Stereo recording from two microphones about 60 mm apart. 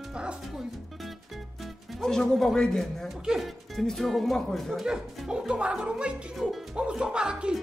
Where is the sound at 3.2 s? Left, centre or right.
Centre.